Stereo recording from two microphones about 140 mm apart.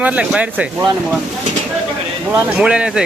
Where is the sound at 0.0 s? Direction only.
10° right (ahead or behind).